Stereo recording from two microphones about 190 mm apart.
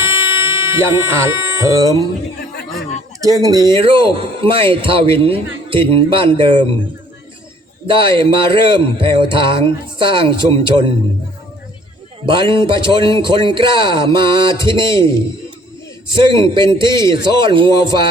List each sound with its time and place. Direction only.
0.0 s a sound: 15° right (ahead or behind)
3.2 s a man's voice: 20° right (ahead or behind)
7.9 s a man's voice: 25° right (ahead or behind)
12.2 s a man's voice: 25° right (ahead or behind)
16.1 s a man's voice: 25° right (ahead or behind)